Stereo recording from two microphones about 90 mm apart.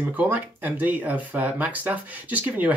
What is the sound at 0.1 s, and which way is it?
Speech, 20° right (ahead or behind).